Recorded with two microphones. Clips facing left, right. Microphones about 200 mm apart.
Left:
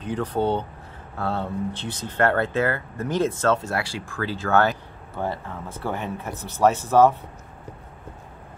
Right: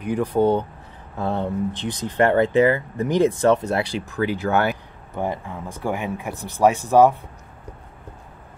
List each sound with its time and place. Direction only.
0.0 s speech: 10° right (ahead or behind)